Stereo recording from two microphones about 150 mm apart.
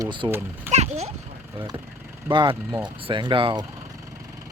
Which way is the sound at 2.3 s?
30° right (ahead or behind).